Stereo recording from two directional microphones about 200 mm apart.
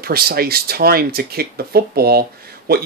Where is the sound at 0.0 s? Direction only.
50° right (ahead or behind).